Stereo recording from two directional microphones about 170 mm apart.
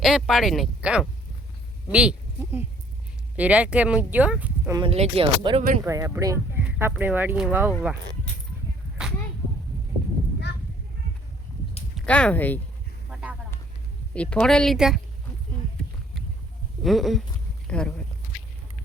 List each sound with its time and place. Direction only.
0.0 s speech: centre (ahead or behind)
4.9 s speech: 35° right (ahead or behind)
5.8 s speech: 20° right (ahead or behind)
9.0 s a sound: 5° right (ahead or behind)
11.9 s speech: 5° left (ahead or behind)
14.1 s speech: 5° left (ahead or behind)
16.8 s speech: centre (ahead or behind)